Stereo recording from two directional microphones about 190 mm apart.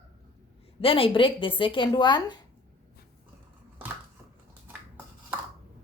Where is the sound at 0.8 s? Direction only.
30° left (ahead or behind).